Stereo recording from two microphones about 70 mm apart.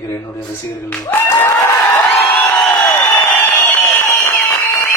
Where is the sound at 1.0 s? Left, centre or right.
Left.